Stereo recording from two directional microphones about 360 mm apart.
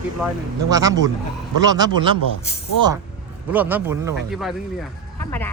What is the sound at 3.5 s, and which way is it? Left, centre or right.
Speech, centre.